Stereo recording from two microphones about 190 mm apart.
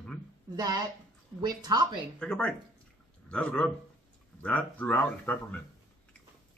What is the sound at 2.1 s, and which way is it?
Speech, 5° left (ahead or behind).